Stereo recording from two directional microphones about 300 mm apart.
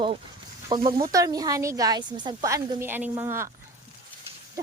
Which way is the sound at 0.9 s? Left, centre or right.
Centre.